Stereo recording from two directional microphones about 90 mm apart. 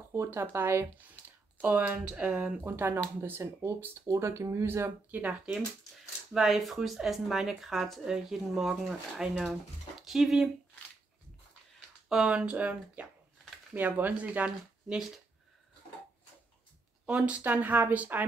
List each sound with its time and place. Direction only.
0.1 s speech: 25° right (ahead or behind)
6.3 s speech: centre (ahead or behind)
12.1 s speech: 10° right (ahead or behind)
17.0 s speech: 15° right (ahead or behind)